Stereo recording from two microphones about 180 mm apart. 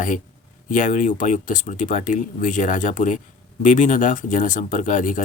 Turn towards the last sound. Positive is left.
turn(degrees=45)  # may be behind; listen again after turning